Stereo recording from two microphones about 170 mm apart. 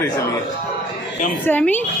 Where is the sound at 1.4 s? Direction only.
10° left (ahead or behind).